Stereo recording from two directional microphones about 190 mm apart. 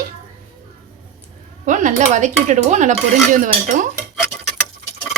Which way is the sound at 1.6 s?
40° right (ahead or behind).